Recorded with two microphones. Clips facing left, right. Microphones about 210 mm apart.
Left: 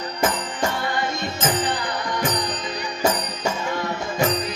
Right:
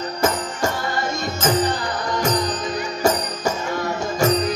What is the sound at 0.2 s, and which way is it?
Music, 45° right (ahead or behind).